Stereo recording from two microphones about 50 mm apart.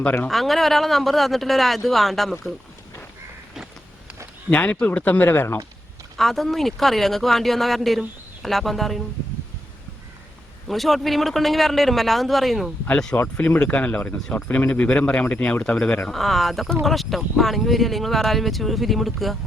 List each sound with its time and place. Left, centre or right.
0.3 s speech: centre
4.5 s speech: left
6.1 s speech: centre
10.7 s speech: centre
13.2 s speech: left
16.0 s speech: centre